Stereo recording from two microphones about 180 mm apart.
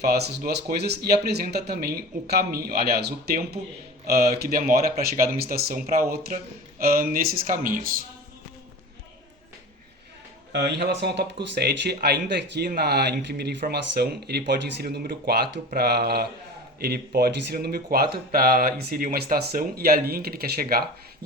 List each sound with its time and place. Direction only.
0.0 s speech: 60° right (ahead or behind)
10.5 s speech: 65° right (ahead or behind)